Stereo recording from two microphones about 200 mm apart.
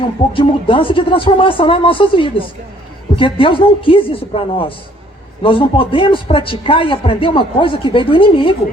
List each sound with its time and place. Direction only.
0.3 s a man's voice: 25° left (ahead or behind)